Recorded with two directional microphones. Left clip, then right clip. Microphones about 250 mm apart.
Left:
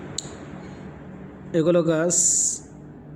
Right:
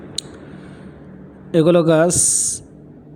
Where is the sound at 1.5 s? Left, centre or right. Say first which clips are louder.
Right 7 dB; right.